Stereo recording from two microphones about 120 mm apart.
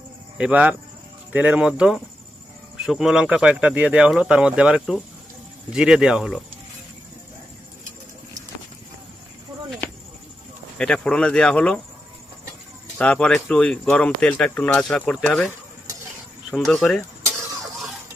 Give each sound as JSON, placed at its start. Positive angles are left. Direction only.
{"t": 0.3, "sound": "speech", "side_deg": -10}
{"t": 10.8, "sound": "speech", "side_deg": 5}
{"t": 13.0, "sound": "speech", "side_deg": 10}
{"t": 16.5, "sound": "speech", "side_deg": 5}